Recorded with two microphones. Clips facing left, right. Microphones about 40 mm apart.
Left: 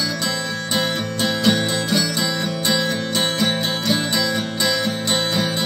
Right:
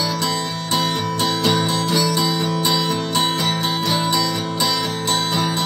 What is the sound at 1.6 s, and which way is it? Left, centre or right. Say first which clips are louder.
Music: right 2 dB; centre.